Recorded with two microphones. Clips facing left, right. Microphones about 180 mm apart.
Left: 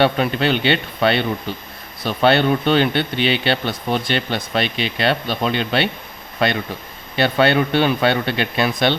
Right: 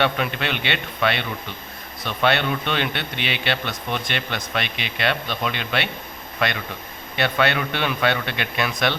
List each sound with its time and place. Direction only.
0.0 s speech: 35° left (ahead or behind)